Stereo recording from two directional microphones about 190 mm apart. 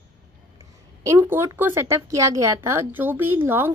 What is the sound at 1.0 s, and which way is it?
A woman's voice, 15° right (ahead or behind).